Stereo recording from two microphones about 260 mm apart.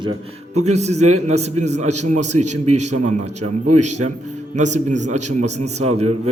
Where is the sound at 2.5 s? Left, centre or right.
Right.